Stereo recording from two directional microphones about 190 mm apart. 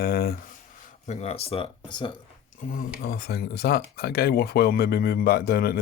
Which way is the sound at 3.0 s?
55° left (ahead or behind).